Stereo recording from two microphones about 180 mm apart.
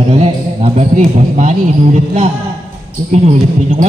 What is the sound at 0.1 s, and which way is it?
Speech, 35° right (ahead or behind).